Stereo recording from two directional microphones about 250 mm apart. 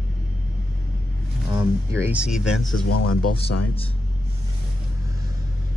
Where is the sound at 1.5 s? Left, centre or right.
Centre.